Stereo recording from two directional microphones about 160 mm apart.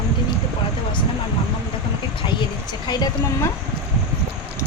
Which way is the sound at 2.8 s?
25° left (ahead or behind).